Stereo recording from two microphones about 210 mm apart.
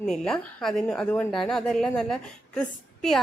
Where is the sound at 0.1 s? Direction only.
Centre (ahead or behind).